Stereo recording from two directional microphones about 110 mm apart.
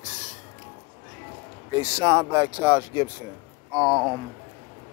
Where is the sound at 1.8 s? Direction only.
30° right (ahead or behind).